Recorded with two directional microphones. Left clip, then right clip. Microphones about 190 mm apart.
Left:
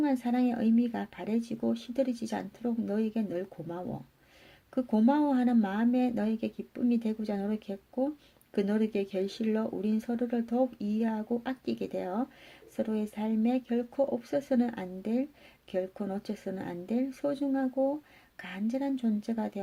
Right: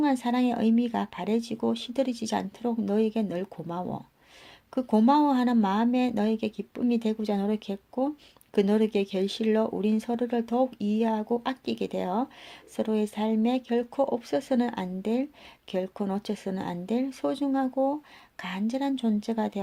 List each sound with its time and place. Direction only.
0.0 s speech: 15° right (ahead or behind)